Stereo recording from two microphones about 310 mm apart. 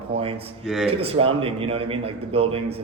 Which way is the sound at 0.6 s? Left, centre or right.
Centre.